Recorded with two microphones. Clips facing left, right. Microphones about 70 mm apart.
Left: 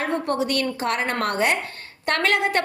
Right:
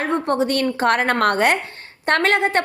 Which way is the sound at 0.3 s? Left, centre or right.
Right.